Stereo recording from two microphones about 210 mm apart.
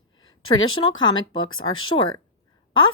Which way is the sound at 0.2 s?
70° left (ahead or behind).